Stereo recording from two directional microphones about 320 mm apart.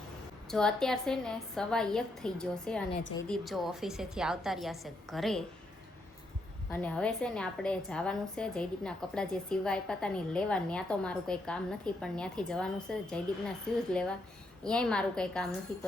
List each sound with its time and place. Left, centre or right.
0.5 s a woman's voice: centre
2.9 s a woman's voice: centre
3.2 s a woman's voice: centre
6.7 s a woman's voice: centre
14.6 s a woman's voice: centre